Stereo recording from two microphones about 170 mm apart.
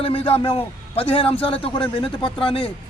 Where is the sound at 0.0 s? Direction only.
30° left (ahead or behind).